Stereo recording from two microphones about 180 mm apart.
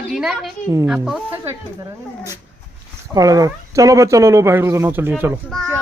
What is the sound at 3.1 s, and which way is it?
A woman's voice, 20° right (ahead or behind).